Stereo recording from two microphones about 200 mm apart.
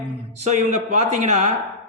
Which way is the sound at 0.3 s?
35° right (ahead or behind).